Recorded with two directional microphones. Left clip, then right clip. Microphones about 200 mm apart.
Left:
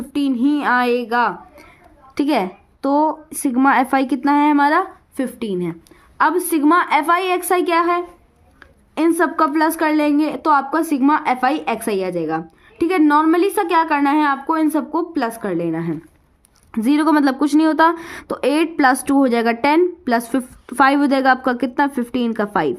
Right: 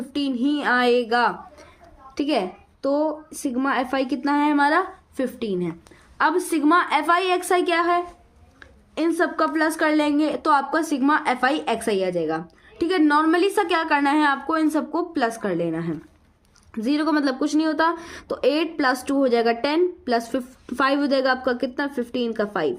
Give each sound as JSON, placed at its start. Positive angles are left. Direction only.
{"t": 0.1, "sound": "speech", "side_deg": 35}
{"t": 2.1, "sound": "a woman's voice", "side_deg": 40}
{"t": 16.7, "sound": "speech", "side_deg": 40}